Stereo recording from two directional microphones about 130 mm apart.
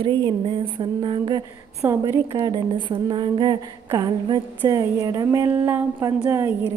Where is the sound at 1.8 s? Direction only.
20° right (ahead or behind).